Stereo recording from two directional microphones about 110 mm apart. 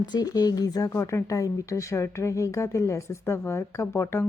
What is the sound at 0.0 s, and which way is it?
Speech, 40° left (ahead or behind).